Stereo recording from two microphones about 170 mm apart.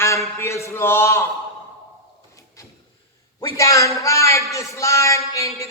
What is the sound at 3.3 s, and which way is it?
Mantra, 20° left (ahead or behind).